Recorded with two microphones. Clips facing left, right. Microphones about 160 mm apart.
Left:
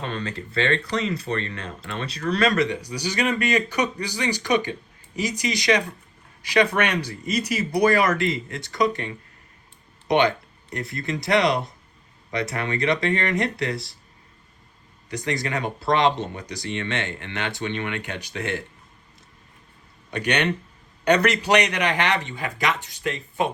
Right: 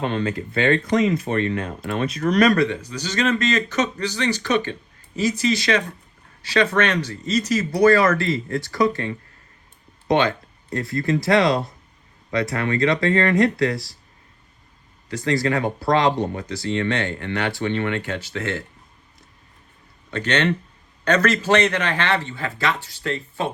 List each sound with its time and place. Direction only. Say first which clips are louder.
0.1 s speech: right 6 dB; 35° left (ahead or behind)
15.1 s speech: right 5 dB; 20° left (ahead or behind)
20.1 s speech: right 2 dB; 15° left (ahead or behind)